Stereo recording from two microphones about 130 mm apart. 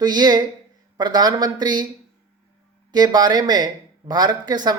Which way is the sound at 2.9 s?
30° right (ahead or behind).